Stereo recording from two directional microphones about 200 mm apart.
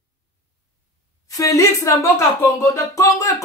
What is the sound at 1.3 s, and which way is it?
Speech, 15° left (ahead or behind).